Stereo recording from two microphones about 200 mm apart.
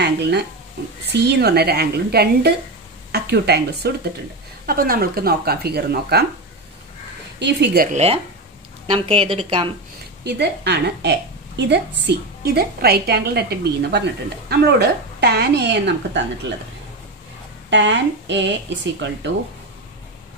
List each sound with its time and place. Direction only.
0.0 s speech: 55° right (ahead or behind)
7.3 s a woman's voice: 60° right (ahead or behind)
8.9 s a woman's voice: 30° right (ahead or behind)
10.2 s a woman's voice: 55° right (ahead or behind)
17.6 s a woman's voice: 65° right (ahead or behind)